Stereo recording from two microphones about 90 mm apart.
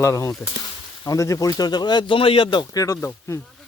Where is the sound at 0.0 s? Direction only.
25° left (ahead or behind); by 2.6 s 65° left (ahead or behind).